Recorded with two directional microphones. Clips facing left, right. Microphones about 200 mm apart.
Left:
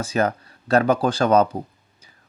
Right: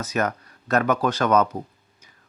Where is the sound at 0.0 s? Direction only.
30° left (ahead or behind).